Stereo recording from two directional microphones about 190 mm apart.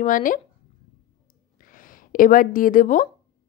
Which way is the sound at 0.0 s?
45° left (ahead or behind).